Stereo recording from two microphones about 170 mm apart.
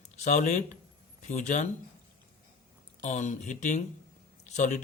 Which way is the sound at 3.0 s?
45° left (ahead or behind).